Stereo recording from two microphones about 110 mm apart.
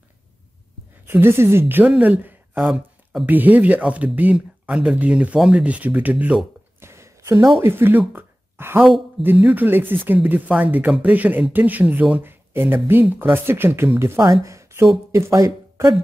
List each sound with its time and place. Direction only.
1.0 s a woman's voice: 20° right (ahead or behind)
2.6 s speech: centre (ahead or behind)
3.3 s speech: 15° right (ahead or behind)
6.8 s a sound: 25° right (ahead or behind)
7.6 s speech: 20° right (ahead or behind)
8.1 s a sound: 20° right (ahead or behind)
9.2 s speech: 15° right (ahead or behind)